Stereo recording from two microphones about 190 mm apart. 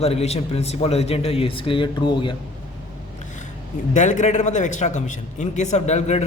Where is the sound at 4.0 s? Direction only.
40° left (ahead or behind).